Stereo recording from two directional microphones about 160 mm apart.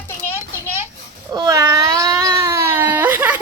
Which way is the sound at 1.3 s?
20° right (ahead or behind).